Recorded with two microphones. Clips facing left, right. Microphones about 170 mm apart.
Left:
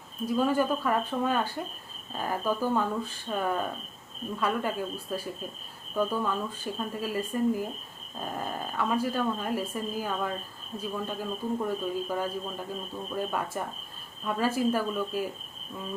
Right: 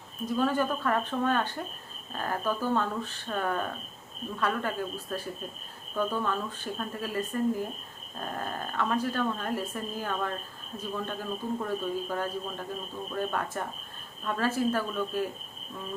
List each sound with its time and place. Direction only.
0.3 s speech: 10° left (ahead or behind)